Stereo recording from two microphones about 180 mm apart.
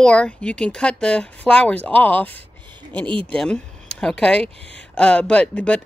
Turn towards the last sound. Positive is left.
turn(degrees=5)  # may be behind; listen again after turning